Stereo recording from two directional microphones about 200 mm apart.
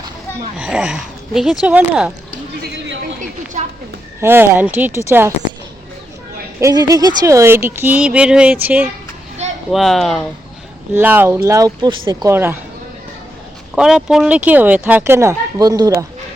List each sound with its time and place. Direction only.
0.5 s speech: 5° right (ahead or behind)
3.6 s a sound: 35° right (ahead or behind)
4.2 s speech: 10° right (ahead or behind)
6.6 s speech: 15° right (ahead or behind); by 10.2 s centre (ahead or behind)
10.9 s speech: 10° right (ahead or behind)
13.7 s speech: 5° right (ahead or behind)